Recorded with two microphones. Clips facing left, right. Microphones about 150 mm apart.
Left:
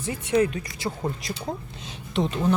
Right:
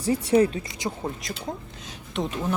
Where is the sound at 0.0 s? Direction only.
35° right (ahead or behind).